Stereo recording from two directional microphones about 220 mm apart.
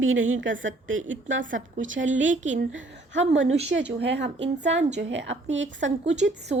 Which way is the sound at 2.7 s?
60° right (ahead or behind).